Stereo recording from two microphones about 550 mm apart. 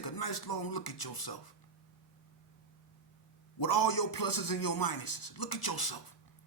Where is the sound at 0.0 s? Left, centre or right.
Left.